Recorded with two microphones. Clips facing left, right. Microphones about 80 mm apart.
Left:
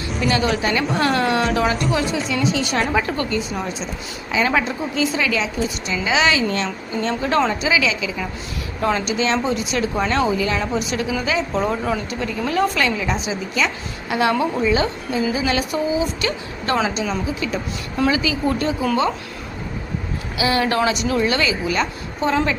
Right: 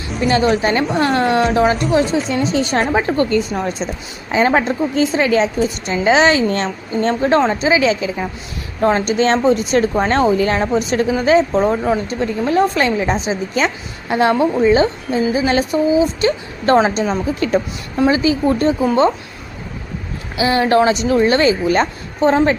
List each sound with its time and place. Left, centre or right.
0.2 s a woman's voice: right
3.2 s a woman's voice: right
17.9 s a woman's voice: right
20.3 s a woman's voice: right